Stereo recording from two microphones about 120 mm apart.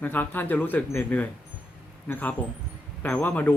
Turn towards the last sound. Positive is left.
turn(degrees=15)  # may be behind; listen again after turning